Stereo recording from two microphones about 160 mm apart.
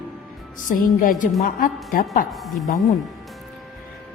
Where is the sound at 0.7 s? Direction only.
55° left (ahead or behind).